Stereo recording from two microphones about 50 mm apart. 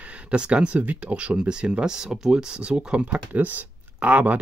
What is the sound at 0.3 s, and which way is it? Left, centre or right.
Speech, right.